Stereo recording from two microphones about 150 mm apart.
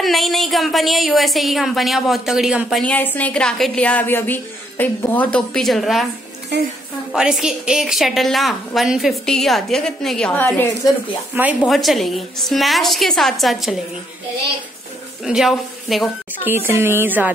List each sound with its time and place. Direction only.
0.0 s a woman's voice: centre (ahead or behind)
2.8 s a woman's voice: 10° left (ahead or behind)
7.1 s a woman's voice: 5° right (ahead or behind); by 10.7 s 15° left (ahead or behind)
11.3 s speech: 10° right (ahead or behind)
11.7 s a woman's voice: centre (ahead or behind)
15.2 s a woman's voice: centre (ahead or behind)
16.4 s speech: 15° right (ahead or behind)